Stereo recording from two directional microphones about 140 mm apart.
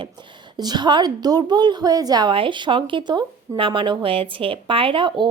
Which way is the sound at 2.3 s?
40° right (ahead or behind).